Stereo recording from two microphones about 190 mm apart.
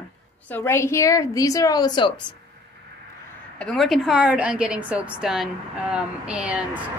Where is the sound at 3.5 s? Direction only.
Centre (ahead or behind).